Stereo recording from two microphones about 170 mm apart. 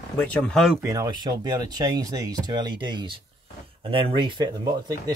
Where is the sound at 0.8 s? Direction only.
25° right (ahead or behind).